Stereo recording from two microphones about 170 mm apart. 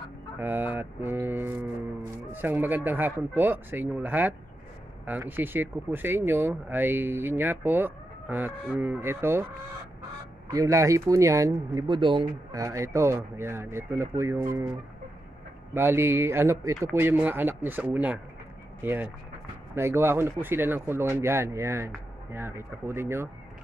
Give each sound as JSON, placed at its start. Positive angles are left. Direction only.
{"t": 0.4, "sound": "speech", "side_deg": -10}
{"t": 10.5, "sound": "speech", "side_deg": -20}
{"t": 12.6, "sound": "speech", "side_deg": -15}
{"t": 15.7, "sound": "speech", "side_deg": -15}